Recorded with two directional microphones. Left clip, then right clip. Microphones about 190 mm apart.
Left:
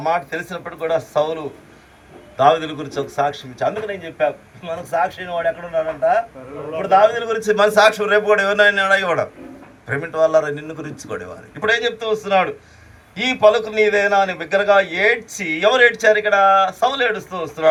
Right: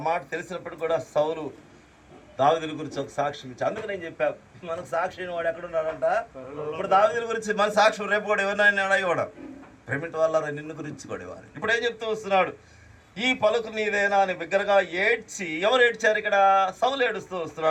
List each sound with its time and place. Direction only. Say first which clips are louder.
0.0 s a man's voice: left 7 dB; 35° left (ahead or behind)